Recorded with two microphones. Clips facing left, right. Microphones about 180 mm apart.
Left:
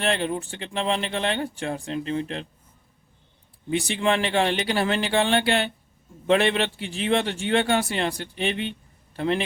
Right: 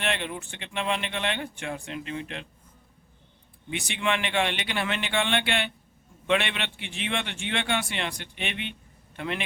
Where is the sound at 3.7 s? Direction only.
35° left (ahead or behind).